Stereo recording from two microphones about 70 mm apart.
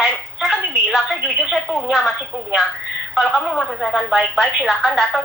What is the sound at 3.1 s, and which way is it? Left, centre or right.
Speech, centre.